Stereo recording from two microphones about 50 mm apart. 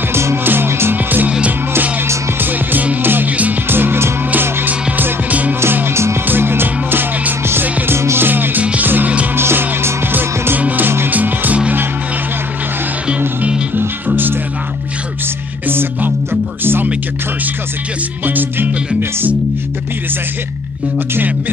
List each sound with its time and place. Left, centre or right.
0.1 s music: right
0.4 s music: right
0.9 s music: right
2.4 s music: right
5.9 s music: right
6.2 s music: right
9.4 s music: right
11.1 s music: right
13.7 s music: right
15.7 s music: right
18.2 s music: right